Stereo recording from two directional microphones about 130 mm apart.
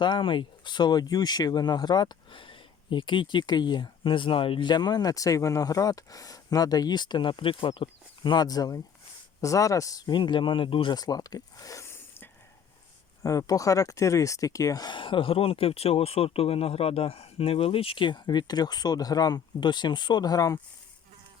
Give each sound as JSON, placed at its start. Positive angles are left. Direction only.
{"t": 0.0, "sound": "speech", "side_deg": 40}
{"t": 10.9, "sound": "speech", "side_deg": 30}